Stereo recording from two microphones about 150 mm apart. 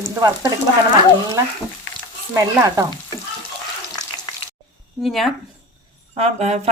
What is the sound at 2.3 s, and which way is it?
Speech, 25° right (ahead or behind).